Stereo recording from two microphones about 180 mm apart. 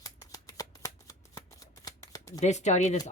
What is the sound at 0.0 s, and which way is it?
Shuffling cards, 20° left (ahead or behind).